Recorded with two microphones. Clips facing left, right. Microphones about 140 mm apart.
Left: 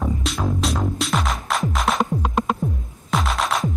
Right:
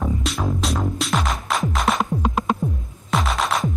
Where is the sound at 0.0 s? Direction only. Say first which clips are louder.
Even; centre (ahead or behind).